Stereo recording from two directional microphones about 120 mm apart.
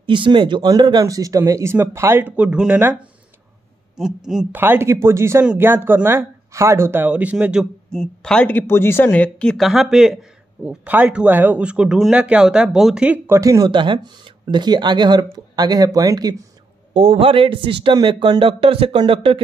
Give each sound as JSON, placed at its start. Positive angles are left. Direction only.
{"t": 0.0, "sound": "speech", "side_deg": -40}
{"t": 3.9, "sound": "speech", "side_deg": -5}
{"t": 4.6, "sound": "speech", "side_deg": -20}
{"t": 7.9, "sound": "speech", "side_deg": 5}
{"t": 13.3, "sound": "speech", "side_deg": -25}
{"t": 13.7, "sound": "speech", "side_deg": -40}
{"t": 16.9, "sound": "speech", "side_deg": -50}
{"t": 17.9, "sound": "speech", "side_deg": -35}